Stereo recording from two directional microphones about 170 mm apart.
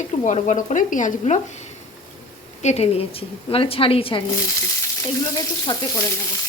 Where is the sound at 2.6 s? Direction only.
40° left (ahead or behind).